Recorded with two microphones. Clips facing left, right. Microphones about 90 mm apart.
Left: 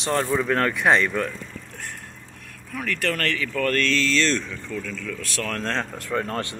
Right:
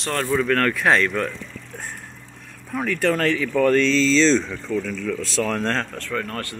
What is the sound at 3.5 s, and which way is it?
Speech, 20° right (ahead or behind).